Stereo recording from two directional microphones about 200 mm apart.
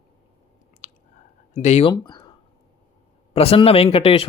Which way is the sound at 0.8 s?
40° left (ahead or behind).